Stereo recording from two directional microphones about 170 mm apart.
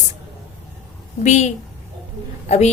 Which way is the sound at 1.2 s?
45° left (ahead or behind).